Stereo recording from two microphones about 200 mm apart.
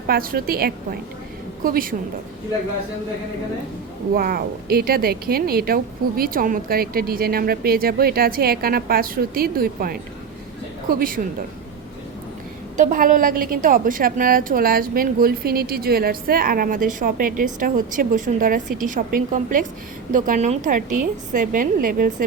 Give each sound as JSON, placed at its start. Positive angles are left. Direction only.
{"t": 0.1, "sound": "a woman's voice", "side_deg": -45}
{"t": 4.1, "sound": "a woman's voice", "side_deg": -50}
{"t": 12.7, "sound": "a woman's voice", "side_deg": -40}